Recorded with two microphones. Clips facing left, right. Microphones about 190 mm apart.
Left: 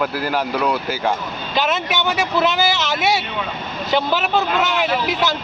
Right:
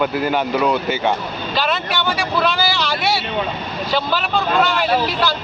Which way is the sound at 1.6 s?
20° left (ahead or behind).